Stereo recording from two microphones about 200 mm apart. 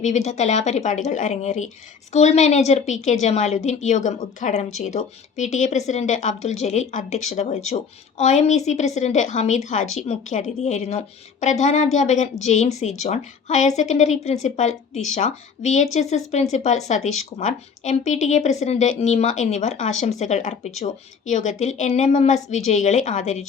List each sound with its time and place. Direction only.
0.0 s a woman's voice: 35° left (ahead or behind)